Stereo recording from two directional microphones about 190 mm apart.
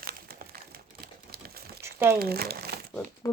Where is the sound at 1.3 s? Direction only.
55° right (ahead or behind).